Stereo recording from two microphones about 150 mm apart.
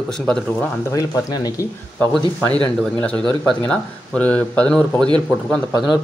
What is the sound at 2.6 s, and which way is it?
Speech, 10° left (ahead or behind).